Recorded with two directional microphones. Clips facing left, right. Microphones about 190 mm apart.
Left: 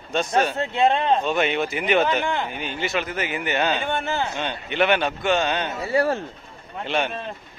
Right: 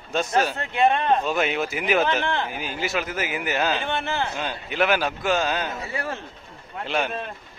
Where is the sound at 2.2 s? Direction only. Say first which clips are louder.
Left 1 dB; 15° left (ahead or behind).